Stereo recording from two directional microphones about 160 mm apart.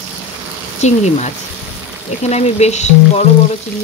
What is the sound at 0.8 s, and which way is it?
Speech, 45° left (ahead or behind).